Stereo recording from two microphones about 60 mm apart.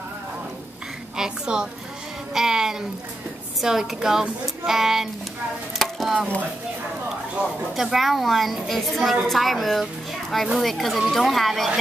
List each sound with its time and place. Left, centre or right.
1.1 s a woman's voice: centre
5.8 s chopping: centre
7.7 s speech: centre